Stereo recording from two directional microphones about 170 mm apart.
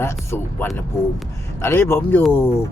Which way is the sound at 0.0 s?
15° left (ahead or behind).